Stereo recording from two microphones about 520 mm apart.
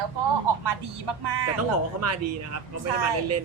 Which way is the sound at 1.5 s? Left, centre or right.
Right.